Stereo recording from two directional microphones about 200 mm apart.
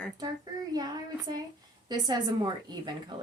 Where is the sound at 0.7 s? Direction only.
20° right (ahead or behind).